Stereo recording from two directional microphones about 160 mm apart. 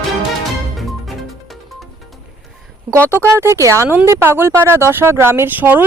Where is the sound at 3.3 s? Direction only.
15° right (ahead or behind).